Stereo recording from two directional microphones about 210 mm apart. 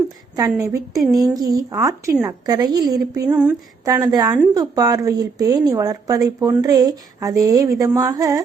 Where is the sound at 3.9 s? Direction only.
20° right (ahead or behind).